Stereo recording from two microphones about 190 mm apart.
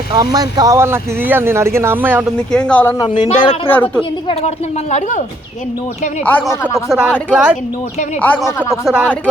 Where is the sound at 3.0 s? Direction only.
25° left (ahead or behind).